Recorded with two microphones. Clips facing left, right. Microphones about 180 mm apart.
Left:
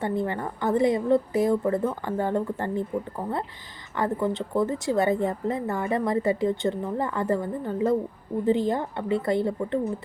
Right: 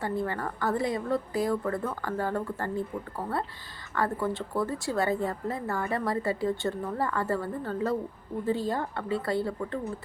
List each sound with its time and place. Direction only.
0.0 s a woman's voice: 20° left (ahead or behind)
3.9 s a woman's voice: 20° left (ahead or behind)